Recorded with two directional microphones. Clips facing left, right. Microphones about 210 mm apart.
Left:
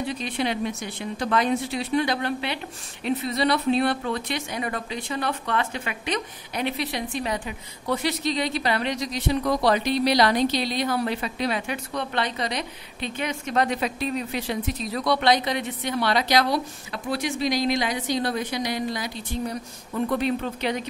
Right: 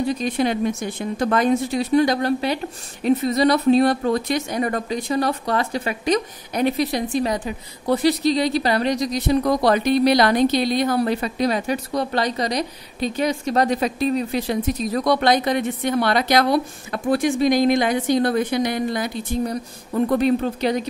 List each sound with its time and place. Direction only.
0.0 s a woman's voice: 45° right (ahead or behind)
19.9 s speech: 40° right (ahead or behind)